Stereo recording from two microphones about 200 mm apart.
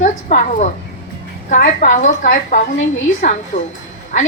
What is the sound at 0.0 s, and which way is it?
A woman's voice, 40° left (ahead or behind).